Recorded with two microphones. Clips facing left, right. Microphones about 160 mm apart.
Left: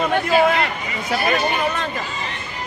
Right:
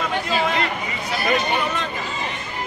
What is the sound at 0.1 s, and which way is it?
Chatter, 55° left (ahead or behind).